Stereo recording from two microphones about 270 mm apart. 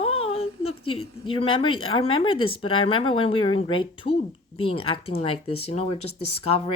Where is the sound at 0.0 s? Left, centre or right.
Left.